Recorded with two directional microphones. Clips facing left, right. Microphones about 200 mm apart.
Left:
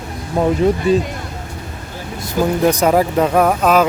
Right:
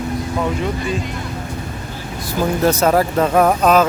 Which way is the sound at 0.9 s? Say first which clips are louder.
Left 11 dB; 40° left (ahead or behind).